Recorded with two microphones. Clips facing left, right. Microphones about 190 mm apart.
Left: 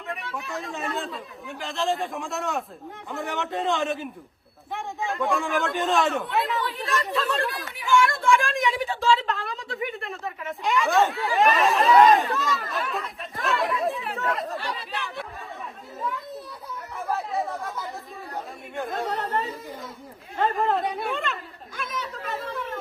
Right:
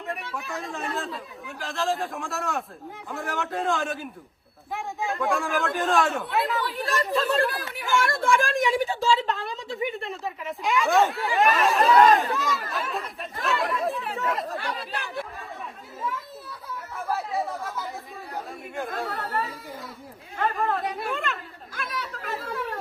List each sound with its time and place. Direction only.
0.1 s a woman's voice: centre (ahead or behind)
8.2 s a woman's voice: 35° right (ahead or behind)
8.7 s a woman's voice: centre (ahead or behind)
17.1 s chatter: centre (ahead or behind)
18.8 s a woman's voice: centre (ahead or behind)
19.0 s speech: 20° left (ahead or behind)
20.3 s speech: 30° left (ahead or behind)
20.8 s a woman's voice: centre (ahead or behind)
21.8 s chatter: centre (ahead or behind)